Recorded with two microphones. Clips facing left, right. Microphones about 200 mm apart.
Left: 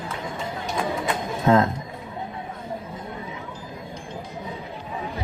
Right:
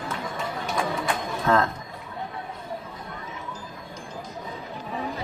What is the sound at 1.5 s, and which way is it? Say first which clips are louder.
Speech: left 4 dB; 20° left (ahead or behind).